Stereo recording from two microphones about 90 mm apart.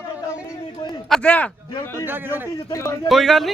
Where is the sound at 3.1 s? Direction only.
Centre (ahead or behind).